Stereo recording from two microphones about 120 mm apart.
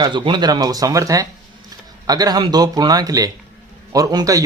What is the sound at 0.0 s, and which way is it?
Speech, 40° right (ahead or behind).